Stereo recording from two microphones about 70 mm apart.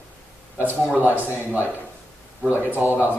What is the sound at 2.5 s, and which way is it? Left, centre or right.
Speech, right.